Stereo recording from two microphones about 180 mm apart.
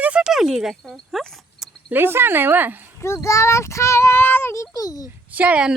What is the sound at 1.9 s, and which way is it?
Speech, 10° right (ahead or behind).